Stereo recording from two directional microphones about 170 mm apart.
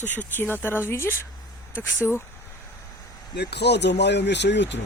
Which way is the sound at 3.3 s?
80° left.